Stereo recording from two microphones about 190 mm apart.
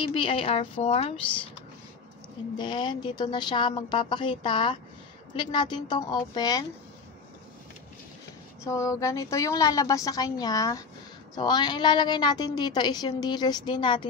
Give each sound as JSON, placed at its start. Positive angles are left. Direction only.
{"t": 0.0, "sound": "a woman's voice", "side_deg": 25}
{"t": 2.5, "sound": "a woman's voice", "side_deg": 25}
{"t": 8.6, "sound": "a woman's voice", "side_deg": 15}